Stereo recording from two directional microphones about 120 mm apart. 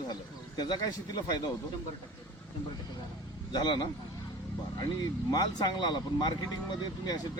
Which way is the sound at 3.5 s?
40° left (ahead or behind).